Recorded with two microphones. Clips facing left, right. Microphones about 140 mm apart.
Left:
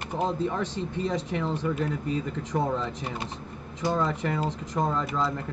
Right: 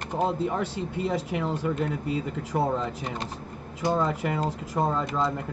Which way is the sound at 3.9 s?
10° right (ahead or behind).